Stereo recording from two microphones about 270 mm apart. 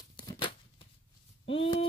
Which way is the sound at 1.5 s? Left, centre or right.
Left.